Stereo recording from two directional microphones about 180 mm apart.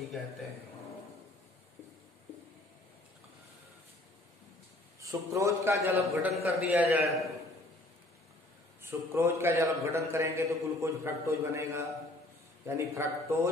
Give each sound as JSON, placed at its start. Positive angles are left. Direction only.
{"t": 5.0, "sound": "a man's voice", "side_deg": -15}
{"t": 8.8, "sound": "a man's voice", "side_deg": -15}